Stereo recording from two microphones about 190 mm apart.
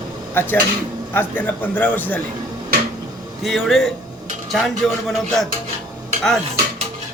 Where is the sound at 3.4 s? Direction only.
Centre (ahead or behind).